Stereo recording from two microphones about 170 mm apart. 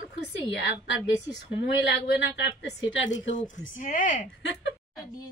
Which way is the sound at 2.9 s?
90° left.